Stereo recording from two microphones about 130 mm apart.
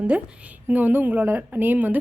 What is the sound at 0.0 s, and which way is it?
A woman's voice, 10° right (ahead or behind).